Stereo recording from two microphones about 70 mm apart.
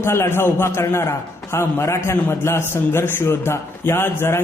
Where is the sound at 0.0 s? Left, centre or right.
Left.